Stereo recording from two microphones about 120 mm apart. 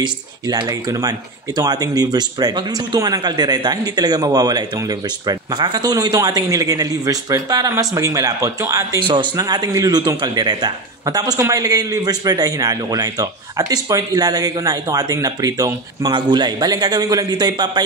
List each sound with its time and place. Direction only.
0.0 s speech: 35° right (ahead or behind)
9.0 s speech: 40° right (ahead or behind)